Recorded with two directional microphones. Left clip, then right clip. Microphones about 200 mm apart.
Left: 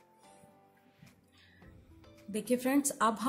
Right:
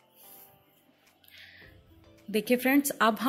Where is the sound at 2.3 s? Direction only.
15° right (ahead or behind).